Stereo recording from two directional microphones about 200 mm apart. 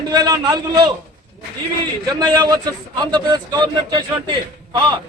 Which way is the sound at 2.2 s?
20° right (ahead or behind).